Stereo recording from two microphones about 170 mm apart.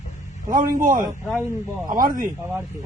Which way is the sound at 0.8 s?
55° right (ahead or behind).